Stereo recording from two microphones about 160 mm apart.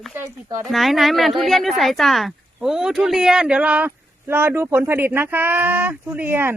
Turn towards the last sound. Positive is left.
turn(degrees=-15)  # may be behind; listen again after turning